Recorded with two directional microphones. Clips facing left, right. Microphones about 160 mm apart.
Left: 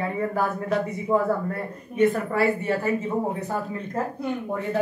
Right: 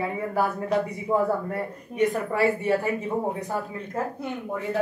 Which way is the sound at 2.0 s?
15° right (ahead or behind).